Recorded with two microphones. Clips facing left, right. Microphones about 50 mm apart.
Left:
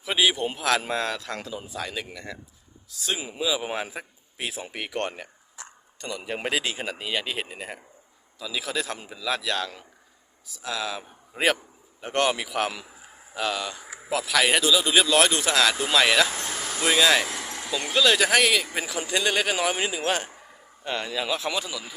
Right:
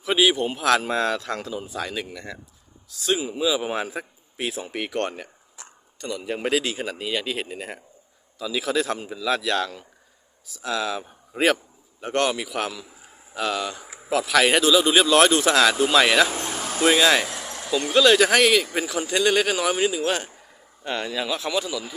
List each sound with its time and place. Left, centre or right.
0.1 s a man's voice: centre
6.4 s speech: centre
11.9 s speech: centre
13.3 s speech: centre
16.3 s vehicle: right
16.8 s speech: centre
17.2 s speech: centre
20.8 s speech: centre